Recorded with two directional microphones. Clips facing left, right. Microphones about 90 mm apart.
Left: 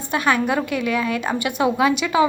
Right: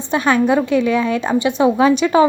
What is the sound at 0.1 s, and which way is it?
A woman's voice, 25° right (ahead or behind).